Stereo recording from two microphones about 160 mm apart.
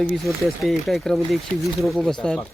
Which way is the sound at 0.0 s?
Centre (ahead or behind).